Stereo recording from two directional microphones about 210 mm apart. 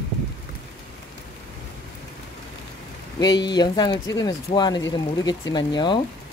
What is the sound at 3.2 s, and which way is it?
Speech, 20° left (ahead or behind).